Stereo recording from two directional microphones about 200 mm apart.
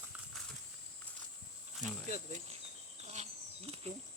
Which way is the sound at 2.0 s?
35° right (ahead or behind).